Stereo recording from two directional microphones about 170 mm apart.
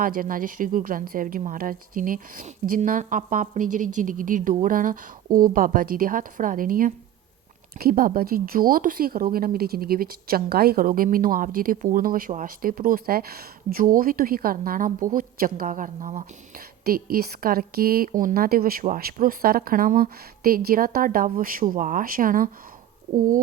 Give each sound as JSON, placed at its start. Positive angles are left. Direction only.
{"t": 0.0, "sound": "a woman's voice", "side_deg": -55}
{"t": 16.8, "sound": "a woman's voice", "side_deg": -60}